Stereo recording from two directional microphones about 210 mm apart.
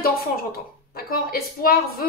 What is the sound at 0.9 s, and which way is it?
Speech, 45° left (ahead or behind).